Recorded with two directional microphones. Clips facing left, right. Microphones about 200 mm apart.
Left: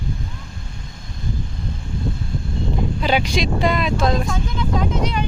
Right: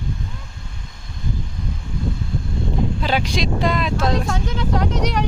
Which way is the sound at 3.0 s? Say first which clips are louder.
Left 6 dB; centre (ahead or behind).